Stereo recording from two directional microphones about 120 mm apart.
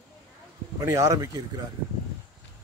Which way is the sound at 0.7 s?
30° right (ahead or behind).